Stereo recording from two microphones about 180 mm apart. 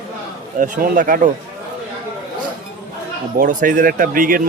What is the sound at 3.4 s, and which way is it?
Speech, 50° right (ahead or behind).